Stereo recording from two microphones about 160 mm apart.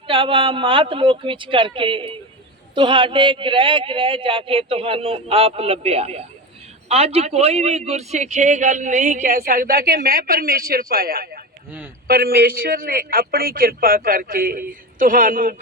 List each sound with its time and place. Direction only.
0.1 s a man's voice: 35° right (ahead or behind); by 15.5 s 55° right (ahead or behind)